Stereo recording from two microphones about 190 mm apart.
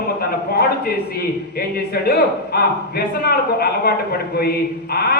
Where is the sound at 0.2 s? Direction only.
55° left (ahead or behind).